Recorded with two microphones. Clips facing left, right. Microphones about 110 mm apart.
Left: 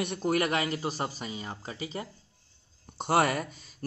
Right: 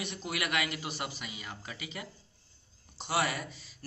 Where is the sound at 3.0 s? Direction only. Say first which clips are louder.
Left 6 dB; 50° left (ahead or behind).